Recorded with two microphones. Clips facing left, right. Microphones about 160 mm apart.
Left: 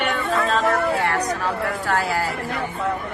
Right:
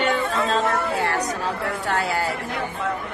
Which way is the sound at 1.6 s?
25° right (ahead or behind).